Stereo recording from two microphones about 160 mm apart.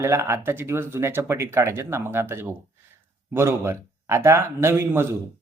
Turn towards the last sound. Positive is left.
turn(degrees=-15)  # may be behind; listen again after turning